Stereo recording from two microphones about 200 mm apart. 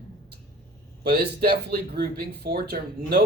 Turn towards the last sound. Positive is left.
turn(degrees=-50)  # may be behind; listen again after turning